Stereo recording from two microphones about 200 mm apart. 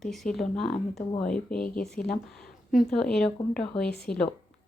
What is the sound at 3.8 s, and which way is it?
Speech, 50° left (ahead or behind).